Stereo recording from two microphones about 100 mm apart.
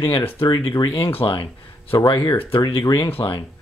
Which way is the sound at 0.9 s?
55° left (ahead or behind).